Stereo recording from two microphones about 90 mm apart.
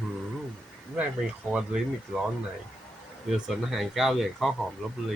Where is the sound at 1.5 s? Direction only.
10° right (ahead or behind).